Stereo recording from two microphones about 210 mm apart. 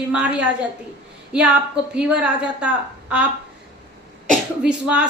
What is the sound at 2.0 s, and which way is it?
Speech, 5° right (ahead or behind).